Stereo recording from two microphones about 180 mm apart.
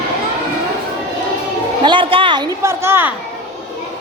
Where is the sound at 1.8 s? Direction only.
25° right (ahead or behind).